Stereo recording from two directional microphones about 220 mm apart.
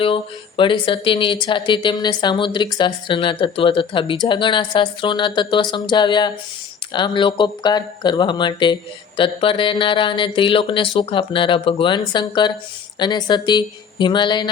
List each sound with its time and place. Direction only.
0.0 s speech: 25° left (ahead or behind)